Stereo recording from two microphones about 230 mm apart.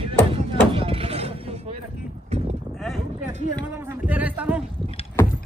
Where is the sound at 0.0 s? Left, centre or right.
Right.